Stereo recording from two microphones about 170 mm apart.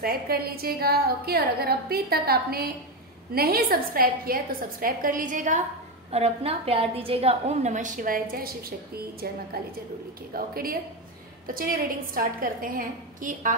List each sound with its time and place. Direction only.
0.0 s a woman's voice: 60° right (ahead or behind)
6.1 s a woman's voice: 35° right (ahead or behind)